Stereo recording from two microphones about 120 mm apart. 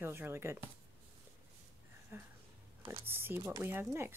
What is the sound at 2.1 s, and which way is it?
Speech, 20° right (ahead or behind).